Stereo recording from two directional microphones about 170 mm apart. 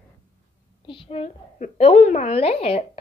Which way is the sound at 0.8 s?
30° left (ahead or behind).